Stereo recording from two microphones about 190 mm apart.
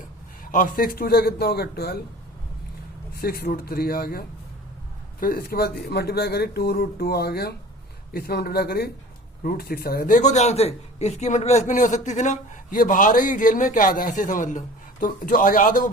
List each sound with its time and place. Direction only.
0.5 s speech: 45° left (ahead or behind)
3.2 s speech: 50° left (ahead or behind)
5.2 s speech: 50° left (ahead or behind)